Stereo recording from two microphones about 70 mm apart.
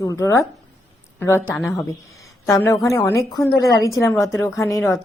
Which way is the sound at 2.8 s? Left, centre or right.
Left.